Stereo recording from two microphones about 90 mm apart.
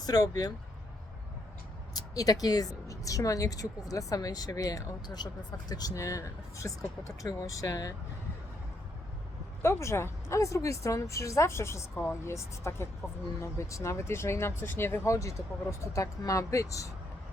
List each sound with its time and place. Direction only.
0.0 s speech: 45° left (ahead or behind)
1.9 s speech: 45° left (ahead or behind)
9.6 s speech: 30° left (ahead or behind)